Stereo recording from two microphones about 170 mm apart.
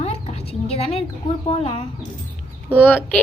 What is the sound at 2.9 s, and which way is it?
Speech, 10° left (ahead or behind).